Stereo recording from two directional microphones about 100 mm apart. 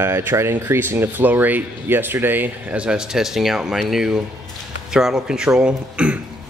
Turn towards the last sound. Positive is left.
turn(degrees=-10)  # may be behind; listen again after turning